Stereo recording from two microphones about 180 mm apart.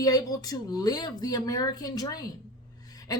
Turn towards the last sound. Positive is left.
turn(degrees=20)  # may be behind; listen again after turning